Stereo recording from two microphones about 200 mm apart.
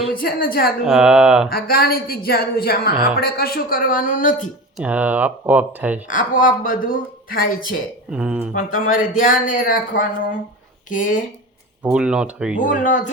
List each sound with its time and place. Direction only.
0.1 s a woman's voice: 45° left (ahead or behind)
0.9 s speech: 5° right (ahead or behind)
1.5 s a woman's voice: 50° left (ahead or behind)
4.8 s speech: 5° right (ahead or behind)
6.1 s a woman's voice: 40° left (ahead or behind)
8.1 s speech: 5° right (ahead or behind)
8.7 s a woman's voice: 45° left (ahead or behind)
11.8 s speech: 5° right (ahead or behind)
12.6 s a woman's voice: 40° left (ahead or behind)